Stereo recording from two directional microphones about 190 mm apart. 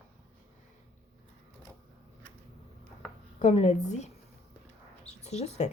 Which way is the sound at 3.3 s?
35° left (ahead or behind).